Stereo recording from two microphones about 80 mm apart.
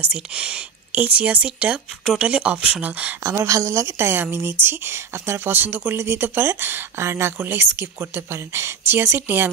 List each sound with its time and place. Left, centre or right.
0.1 s speech: centre
3.2 s speech: right